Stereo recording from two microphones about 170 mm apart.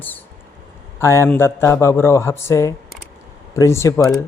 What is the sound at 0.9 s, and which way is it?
A man's voice, 15° left (ahead or behind).